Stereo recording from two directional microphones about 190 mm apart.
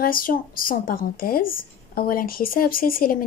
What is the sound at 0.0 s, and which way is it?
A woman's voice, 45° left (ahead or behind).